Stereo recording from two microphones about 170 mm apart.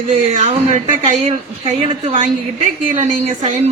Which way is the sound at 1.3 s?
40° right (ahead or behind).